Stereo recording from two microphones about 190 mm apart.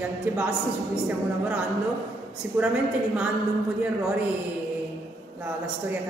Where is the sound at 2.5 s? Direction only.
5° right (ahead or behind).